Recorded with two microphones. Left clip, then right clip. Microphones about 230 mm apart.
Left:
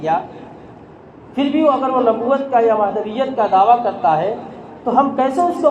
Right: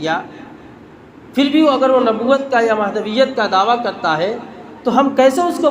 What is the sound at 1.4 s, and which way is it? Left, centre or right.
A man's voice, right.